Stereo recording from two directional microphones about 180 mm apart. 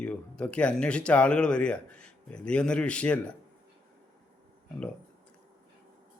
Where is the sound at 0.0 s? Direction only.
5° left (ahead or behind).